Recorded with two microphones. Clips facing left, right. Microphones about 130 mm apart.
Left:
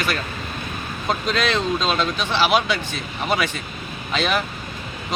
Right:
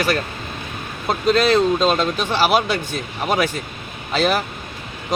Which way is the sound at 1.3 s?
40° right (ahead or behind).